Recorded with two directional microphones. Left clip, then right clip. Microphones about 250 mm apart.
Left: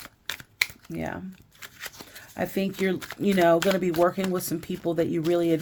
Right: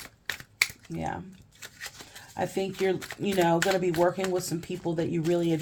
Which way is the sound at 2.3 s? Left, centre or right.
Left.